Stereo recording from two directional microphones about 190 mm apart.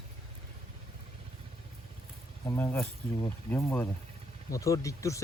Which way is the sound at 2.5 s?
15° left (ahead or behind).